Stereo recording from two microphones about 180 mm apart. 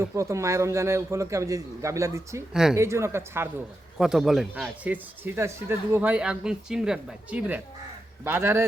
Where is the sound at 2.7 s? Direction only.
15° right (ahead or behind).